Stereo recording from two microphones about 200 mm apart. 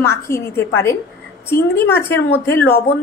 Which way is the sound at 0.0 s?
10° left (ahead or behind).